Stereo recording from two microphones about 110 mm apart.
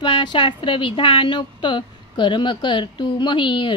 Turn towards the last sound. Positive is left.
turn(degrees=45)  # may be behind; listen again after turning